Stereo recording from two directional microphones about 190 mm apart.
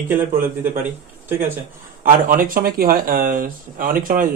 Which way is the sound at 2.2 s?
50° right (ahead or behind).